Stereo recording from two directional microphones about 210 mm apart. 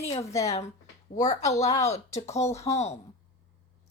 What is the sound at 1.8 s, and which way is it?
Speech, 30° left (ahead or behind).